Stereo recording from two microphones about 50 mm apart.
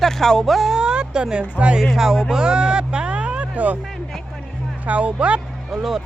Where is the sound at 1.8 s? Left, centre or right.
Centre; by 3.8 s right.